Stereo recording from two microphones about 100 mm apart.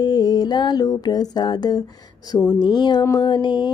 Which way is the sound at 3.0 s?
30° left (ahead or behind).